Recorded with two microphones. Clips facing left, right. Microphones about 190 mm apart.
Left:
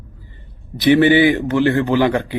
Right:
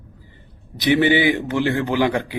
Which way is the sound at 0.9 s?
15° right (ahead or behind).